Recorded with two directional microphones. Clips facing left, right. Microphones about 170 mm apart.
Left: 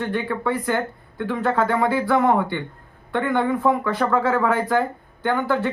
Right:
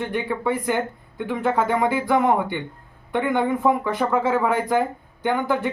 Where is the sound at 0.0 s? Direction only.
15° right (ahead or behind).